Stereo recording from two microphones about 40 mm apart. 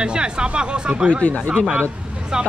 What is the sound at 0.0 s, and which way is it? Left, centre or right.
Speech, right.